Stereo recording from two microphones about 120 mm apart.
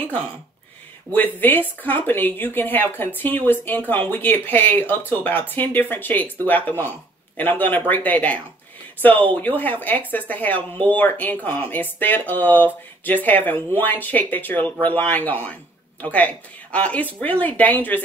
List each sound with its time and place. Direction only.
1.1 s speech: 15° left (ahead or behind)
9.6 s speech: 15° left (ahead or behind)